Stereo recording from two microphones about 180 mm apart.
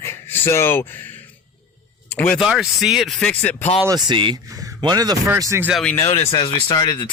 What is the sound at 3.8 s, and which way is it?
Speech, 25° right (ahead or behind).